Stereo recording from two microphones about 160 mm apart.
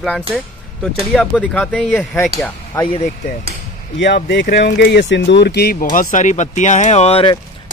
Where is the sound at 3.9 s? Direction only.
90° left; by 7.4 s 35° left (ahead or behind).